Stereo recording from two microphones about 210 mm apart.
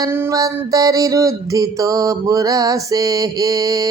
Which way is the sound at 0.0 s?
15° right (ahead or behind).